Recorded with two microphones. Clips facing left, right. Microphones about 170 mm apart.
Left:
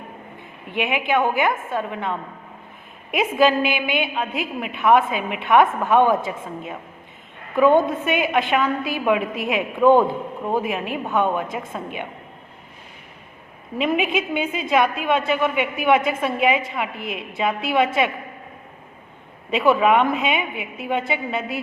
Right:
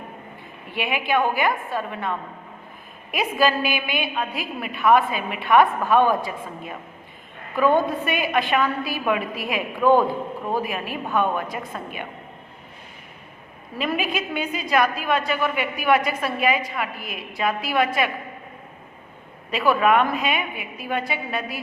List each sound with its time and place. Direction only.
0.7 s a woman's voice: 20° left (ahead or behind)
3.4 s a woman's voice: 20° left (ahead or behind)
13.8 s a woman's voice: 20° left (ahead or behind)
19.5 s a woman's voice: 20° left (ahead or behind)